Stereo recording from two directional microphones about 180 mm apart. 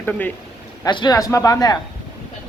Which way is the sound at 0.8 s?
25° left (ahead or behind).